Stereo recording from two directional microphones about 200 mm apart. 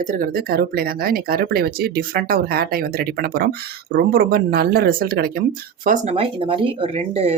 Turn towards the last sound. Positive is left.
turn(degrees=-30)  # may be behind; listen again after turning